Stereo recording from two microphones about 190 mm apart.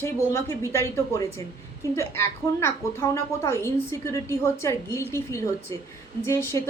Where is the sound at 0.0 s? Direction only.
15° left (ahead or behind).